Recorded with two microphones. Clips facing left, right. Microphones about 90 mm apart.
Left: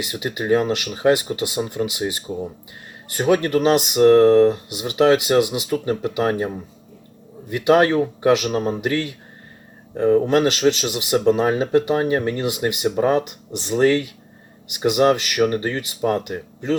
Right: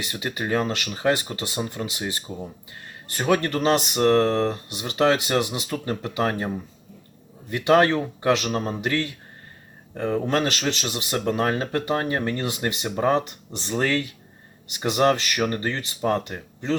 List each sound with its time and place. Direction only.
0.0 s speech: 15° left (ahead or behind)
7.5 s speech: 15° left (ahead or behind)